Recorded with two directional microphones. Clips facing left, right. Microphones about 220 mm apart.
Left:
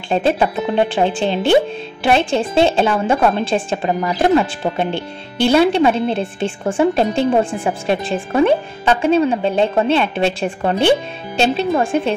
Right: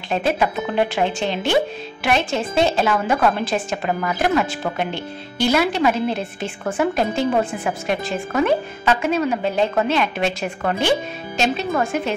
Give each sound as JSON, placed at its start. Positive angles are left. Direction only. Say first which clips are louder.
{"t": 0.1, "sound": "a woman's voice", "louder": "left 4 dB", "side_deg": 30}